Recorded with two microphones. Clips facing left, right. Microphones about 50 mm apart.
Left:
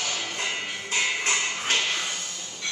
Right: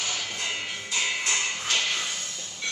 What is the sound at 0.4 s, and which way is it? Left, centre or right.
Music, left.